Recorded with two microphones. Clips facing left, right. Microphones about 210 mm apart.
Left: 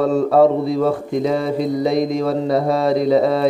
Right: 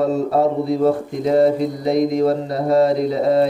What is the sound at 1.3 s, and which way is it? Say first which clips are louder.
Mantra: right 3 dB; 90° left.